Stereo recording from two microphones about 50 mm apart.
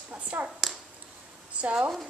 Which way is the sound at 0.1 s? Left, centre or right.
Right.